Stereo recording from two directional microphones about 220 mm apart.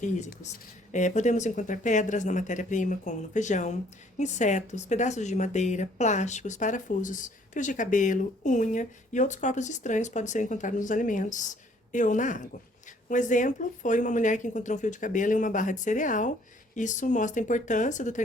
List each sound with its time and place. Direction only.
0.0 s speech: 35° left (ahead or behind)